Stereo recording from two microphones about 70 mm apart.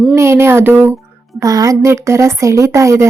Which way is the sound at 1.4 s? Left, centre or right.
Right.